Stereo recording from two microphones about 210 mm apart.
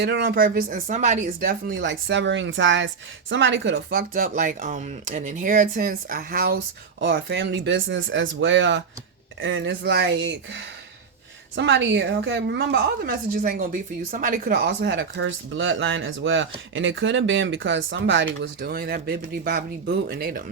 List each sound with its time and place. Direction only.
0.0 s speech: 50° right (ahead or behind)
1.7 s a woman's voice: 60° right (ahead or behind); by 20.4 s 45° right (ahead or behind)